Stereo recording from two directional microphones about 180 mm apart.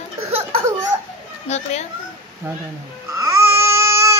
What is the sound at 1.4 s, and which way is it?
Speech, 40° left (ahead or behind).